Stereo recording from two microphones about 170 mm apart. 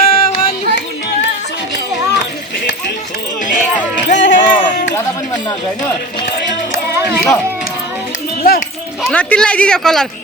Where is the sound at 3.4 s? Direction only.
50° left (ahead or behind).